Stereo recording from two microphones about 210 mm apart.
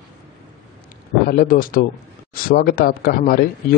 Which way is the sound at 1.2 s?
45° left (ahead or behind).